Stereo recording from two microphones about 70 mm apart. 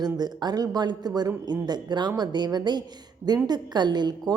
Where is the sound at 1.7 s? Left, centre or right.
Right.